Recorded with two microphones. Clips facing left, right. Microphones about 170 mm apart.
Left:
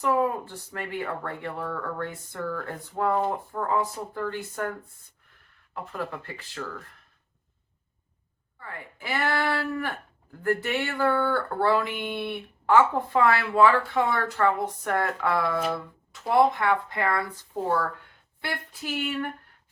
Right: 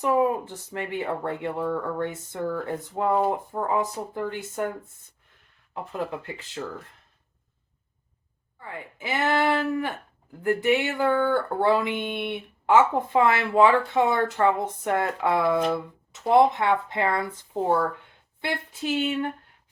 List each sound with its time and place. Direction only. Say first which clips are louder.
0.0 s speech: right 2 dB; 20° right (ahead or behind)
8.5 s speech: right 3 dB; 20° right (ahead or behind)